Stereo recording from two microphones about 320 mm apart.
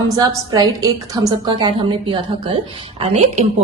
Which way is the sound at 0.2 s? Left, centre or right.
Centre.